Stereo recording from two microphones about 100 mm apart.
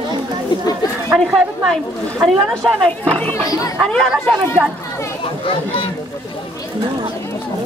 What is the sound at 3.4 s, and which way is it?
Speech, 35° left (ahead or behind).